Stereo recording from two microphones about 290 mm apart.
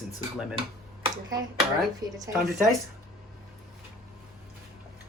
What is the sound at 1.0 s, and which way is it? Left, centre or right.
Speech, centre.